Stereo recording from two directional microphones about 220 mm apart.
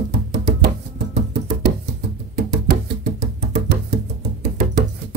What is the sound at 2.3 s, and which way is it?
Music, 45° right (ahead or behind).